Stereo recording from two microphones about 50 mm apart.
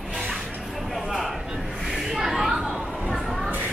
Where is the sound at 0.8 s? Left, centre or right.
Centre.